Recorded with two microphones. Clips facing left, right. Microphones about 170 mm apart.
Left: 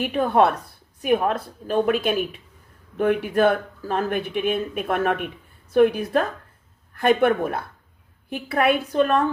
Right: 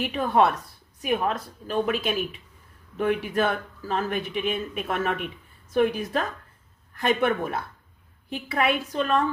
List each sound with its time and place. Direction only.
0.0 s a woman's voice: 50° left (ahead or behind)